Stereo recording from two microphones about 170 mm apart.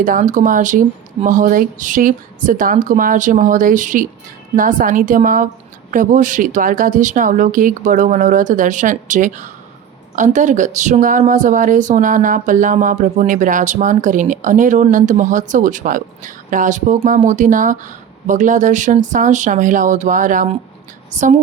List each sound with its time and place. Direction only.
0.0 s a woman's voice: 50° right (ahead or behind)